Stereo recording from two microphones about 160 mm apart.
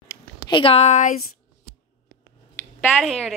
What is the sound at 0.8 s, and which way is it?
Speech, 45° left (ahead or behind).